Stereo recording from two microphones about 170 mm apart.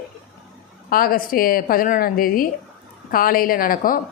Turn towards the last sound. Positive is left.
turn(degrees=55)  # may be behind; listen again after turning